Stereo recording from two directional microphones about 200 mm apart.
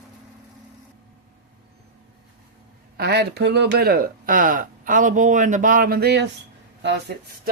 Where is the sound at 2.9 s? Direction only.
55° right (ahead or behind).